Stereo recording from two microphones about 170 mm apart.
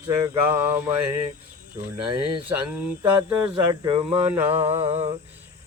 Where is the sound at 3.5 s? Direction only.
25° right (ahead or behind).